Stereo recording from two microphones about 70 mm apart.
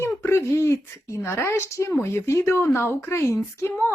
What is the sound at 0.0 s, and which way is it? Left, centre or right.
Speech, left.